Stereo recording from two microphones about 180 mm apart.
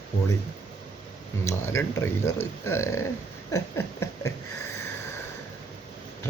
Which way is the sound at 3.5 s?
15° left (ahead or behind).